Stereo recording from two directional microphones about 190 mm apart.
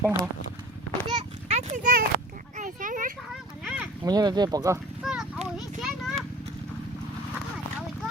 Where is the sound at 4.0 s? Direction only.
20° right (ahead or behind).